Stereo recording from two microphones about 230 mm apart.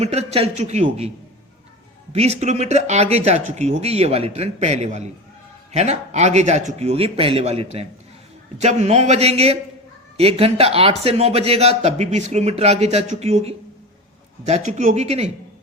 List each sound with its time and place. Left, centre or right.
0.0 s speech: right
2.1 s speech: right